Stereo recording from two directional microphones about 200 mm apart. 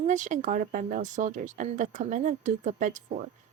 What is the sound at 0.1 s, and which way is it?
Speech, 40° right (ahead or behind).